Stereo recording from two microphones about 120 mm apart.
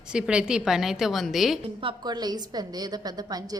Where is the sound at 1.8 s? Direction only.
35° right (ahead or behind).